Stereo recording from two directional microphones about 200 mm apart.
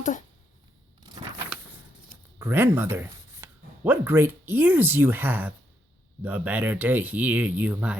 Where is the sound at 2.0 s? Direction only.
10° right (ahead or behind).